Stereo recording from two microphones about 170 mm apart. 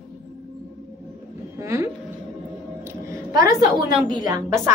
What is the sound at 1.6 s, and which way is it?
A woman's voice, 15° right (ahead or behind).